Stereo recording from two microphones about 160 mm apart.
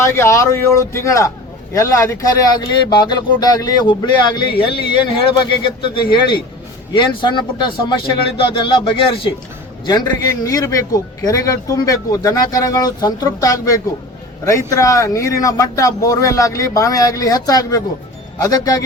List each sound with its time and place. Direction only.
0.0 s a man's voice: 15° left (ahead or behind); by 5.5 s 30° left (ahead or behind)
6.9 s a man's voice: 30° left (ahead or behind)